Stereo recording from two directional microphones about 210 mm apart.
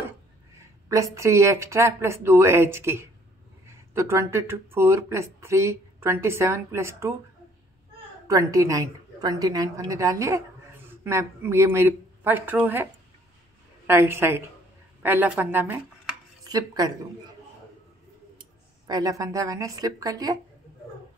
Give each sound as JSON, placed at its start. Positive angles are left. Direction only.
{"t": 1.1, "sound": "speech", "side_deg": -15}
{"t": 8.3, "sound": "speech", "side_deg": -15}
{"t": 13.8, "sound": "speech", "side_deg": -10}
{"t": 16.4, "sound": "speech", "side_deg": -20}
{"t": 18.9, "sound": "speech", "side_deg": -15}